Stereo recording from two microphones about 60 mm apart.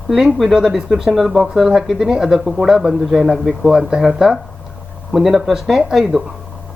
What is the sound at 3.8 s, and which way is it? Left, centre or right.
Speech, centre.